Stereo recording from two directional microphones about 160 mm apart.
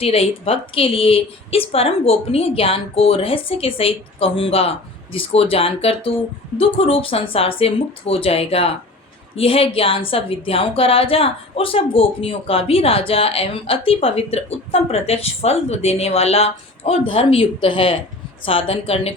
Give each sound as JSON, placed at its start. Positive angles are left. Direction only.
{"t": 0.0, "sound": "a woman's voice", "side_deg": 35}